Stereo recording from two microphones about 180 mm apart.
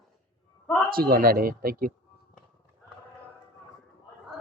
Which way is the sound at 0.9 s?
55° right (ahead or behind).